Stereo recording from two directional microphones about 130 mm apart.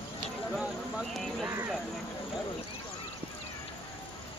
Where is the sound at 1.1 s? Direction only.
Centre (ahead or behind).